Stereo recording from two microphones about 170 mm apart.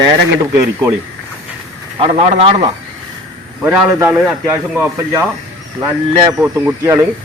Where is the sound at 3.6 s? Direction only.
10° right (ahead or behind).